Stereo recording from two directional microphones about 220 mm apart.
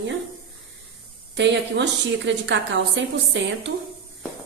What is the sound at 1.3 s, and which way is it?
A woman's voice, 50° right (ahead or behind).